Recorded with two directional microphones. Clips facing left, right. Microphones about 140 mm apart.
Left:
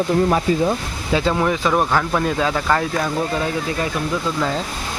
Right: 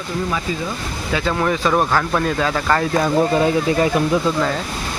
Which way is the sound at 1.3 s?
10° left (ahead or behind).